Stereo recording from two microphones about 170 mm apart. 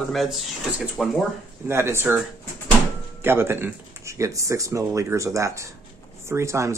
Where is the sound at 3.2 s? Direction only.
15° right (ahead or behind).